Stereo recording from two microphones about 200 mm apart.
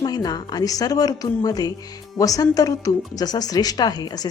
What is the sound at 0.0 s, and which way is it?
Speech, 20° left (ahead or behind).